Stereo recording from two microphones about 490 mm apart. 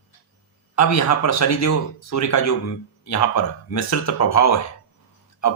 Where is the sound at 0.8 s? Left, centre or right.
Left.